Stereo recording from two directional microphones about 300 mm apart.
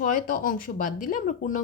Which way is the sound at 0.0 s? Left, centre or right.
Left.